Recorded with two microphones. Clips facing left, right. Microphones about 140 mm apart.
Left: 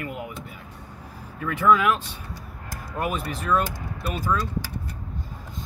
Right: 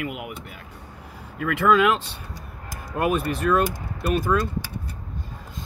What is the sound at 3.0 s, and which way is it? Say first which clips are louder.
Speech: right 6 dB; 75° right (ahead or behind).